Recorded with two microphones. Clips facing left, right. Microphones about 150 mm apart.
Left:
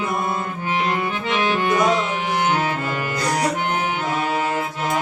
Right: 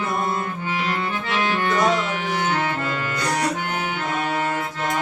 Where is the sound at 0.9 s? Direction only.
15° left (ahead or behind).